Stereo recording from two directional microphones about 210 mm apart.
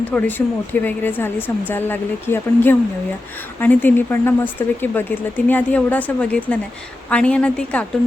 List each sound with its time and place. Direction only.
0.1 s a woman's voice: 10° left (ahead or behind)